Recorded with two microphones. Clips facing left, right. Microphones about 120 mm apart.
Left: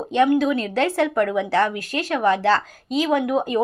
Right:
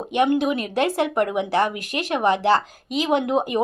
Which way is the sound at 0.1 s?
20° right (ahead or behind).